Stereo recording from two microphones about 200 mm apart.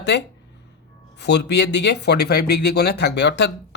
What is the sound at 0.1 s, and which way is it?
Speech, 60° left (ahead or behind).